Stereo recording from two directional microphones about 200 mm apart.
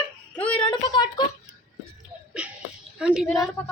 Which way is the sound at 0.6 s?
20° left (ahead or behind).